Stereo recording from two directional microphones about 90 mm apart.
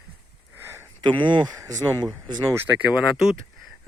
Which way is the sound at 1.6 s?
35° right (ahead or behind).